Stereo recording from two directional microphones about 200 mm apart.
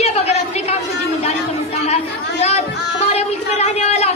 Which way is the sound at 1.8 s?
30° left (ahead or behind).